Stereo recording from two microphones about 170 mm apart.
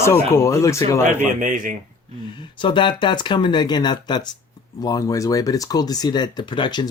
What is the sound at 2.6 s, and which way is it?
Speech, 30° left (ahead or behind).